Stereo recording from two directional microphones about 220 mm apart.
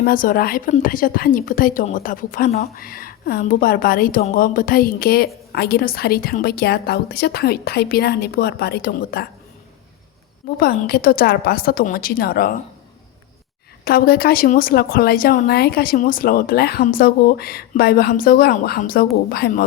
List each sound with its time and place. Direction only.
0.0 s a woman's voice: 40° left (ahead or behind)
10.6 s a woman's voice: 45° left (ahead or behind)
13.8 s a woman's voice: 45° left (ahead or behind)